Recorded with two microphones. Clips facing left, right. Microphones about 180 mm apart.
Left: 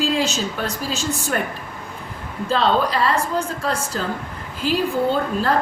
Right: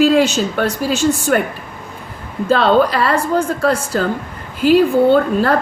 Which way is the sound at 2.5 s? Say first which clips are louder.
Right 6 dB; 65° right (ahead or behind).